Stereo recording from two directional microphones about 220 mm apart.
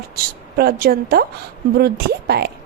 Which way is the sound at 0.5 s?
45° right (ahead or behind).